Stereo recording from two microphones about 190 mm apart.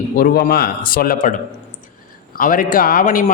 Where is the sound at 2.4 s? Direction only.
45° left (ahead or behind).